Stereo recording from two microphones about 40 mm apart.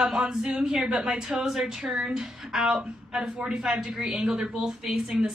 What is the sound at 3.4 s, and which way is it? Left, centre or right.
Speech, right.